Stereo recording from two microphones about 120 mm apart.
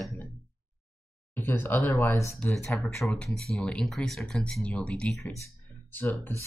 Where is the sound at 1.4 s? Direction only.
15° left (ahead or behind).